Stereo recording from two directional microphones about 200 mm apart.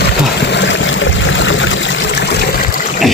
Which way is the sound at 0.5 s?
65° left (ahead or behind).